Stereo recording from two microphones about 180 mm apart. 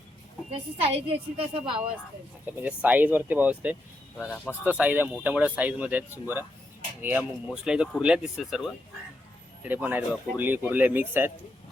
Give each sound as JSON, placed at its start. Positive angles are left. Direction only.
{"t": 0.5, "sound": "a woman's voice", "side_deg": -35}
{"t": 2.6, "sound": "speech", "side_deg": -10}